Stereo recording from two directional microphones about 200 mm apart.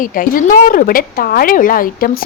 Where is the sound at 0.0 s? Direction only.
45° left (ahead or behind).